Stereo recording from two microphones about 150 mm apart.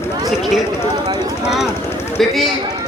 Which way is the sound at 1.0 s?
25° right (ahead or behind).